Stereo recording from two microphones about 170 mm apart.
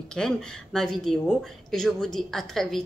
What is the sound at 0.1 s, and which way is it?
Speech, 5° left (ahead or behind).